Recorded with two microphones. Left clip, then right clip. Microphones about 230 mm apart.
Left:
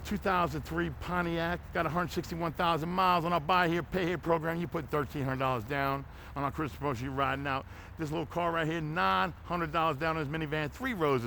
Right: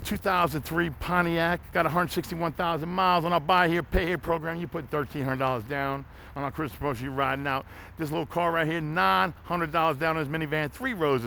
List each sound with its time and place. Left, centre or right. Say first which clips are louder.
0.0 s speech: right 5 dB; right
2.6 s a man's voice: right 1 dB; centre
5.1 s speech: right 4 dB; right